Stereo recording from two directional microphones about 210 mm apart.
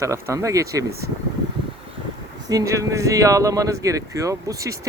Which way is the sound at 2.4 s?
15° right (ahead or behind).